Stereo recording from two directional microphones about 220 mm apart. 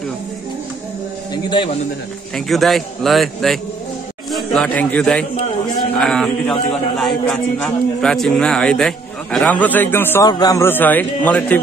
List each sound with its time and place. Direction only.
1.3 s a man's voice: 20° left (ahead or behind)
2.3 s a man's voice: centre (ahead or behind)